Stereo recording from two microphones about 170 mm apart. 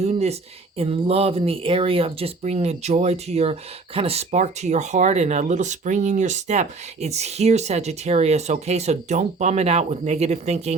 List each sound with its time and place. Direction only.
0.0 s speech: 40° right (ahead or behind)